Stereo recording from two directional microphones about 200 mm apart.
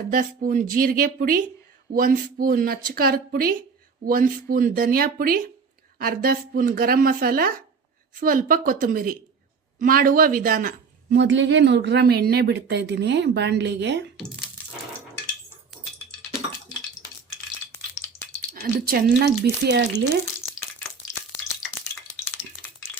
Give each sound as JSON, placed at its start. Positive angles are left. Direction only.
{"t": 0.1, "sound": "a woman's voice", "side_deg": -45}
{"t": 11.2, "sound": "speech", "side_deg": -65}
{"t": 18.5, "sound": "speech", "side_deg": -50}